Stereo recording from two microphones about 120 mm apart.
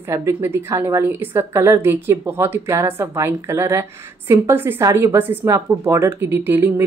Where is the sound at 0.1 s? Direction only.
20° right (ahead or behind).